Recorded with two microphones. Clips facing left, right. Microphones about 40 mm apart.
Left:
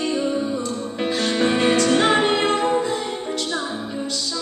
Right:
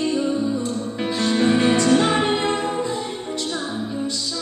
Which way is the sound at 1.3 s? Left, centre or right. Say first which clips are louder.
Right 1 dB; centre.